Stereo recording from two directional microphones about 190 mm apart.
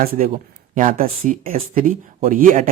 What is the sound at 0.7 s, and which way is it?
Speech, 45° right (ahead or behind).